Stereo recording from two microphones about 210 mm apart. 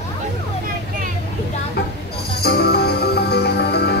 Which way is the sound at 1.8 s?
50° left (ahead or behind).